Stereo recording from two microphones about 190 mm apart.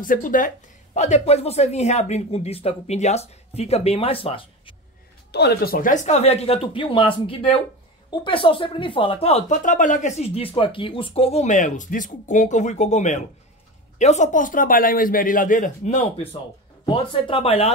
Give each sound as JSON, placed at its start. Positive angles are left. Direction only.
{"t": 0.0, "sound": "speech", "side_deg": 45}
{"t": 5.3, "sound": "speech", "side_deg": 60}
{"t": 16.8, "sound": "speech", "side_deg": 25}